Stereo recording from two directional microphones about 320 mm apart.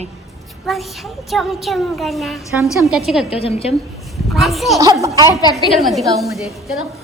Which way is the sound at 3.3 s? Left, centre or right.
Centre.